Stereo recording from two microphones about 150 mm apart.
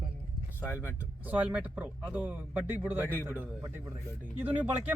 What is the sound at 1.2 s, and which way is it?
Speech, 10° right (ahead or behind).